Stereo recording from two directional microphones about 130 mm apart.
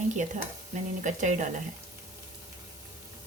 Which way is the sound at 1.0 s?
70° right (ahead or behind).